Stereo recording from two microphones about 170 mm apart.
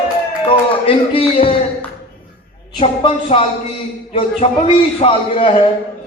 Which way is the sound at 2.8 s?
35° left (ahead or behind).